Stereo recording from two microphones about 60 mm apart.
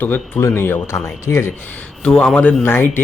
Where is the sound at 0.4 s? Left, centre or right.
Left.